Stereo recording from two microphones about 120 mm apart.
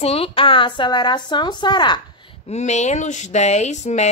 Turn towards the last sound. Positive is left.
turn(degrees=75)  # may be behind; listen again after turning